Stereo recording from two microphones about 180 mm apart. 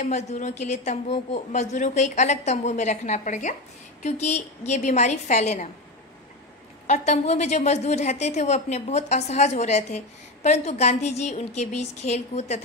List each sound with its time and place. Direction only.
0.0 s a woman's voice: 40° left (ahead or behind)
6.9 s a woman's voice: 40° left (ahead or behind)